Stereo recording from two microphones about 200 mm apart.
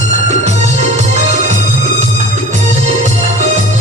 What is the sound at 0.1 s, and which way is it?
Music, 35° right (ahead or behind).